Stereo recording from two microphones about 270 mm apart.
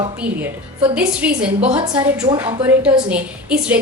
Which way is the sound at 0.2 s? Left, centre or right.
Centre.